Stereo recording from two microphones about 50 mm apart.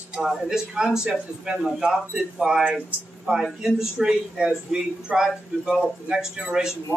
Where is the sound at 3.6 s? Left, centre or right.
Centre.